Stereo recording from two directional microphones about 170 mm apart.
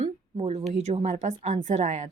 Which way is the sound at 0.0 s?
40° right (ahead or behind).